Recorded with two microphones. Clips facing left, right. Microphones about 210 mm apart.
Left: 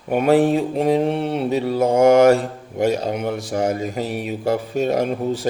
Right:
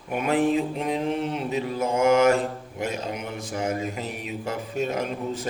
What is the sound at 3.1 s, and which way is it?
Speech, 70° left (ahead or behind).